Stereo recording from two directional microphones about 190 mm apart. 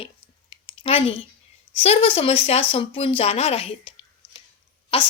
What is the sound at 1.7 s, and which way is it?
A woman's voice, 30° left (ahead or behind).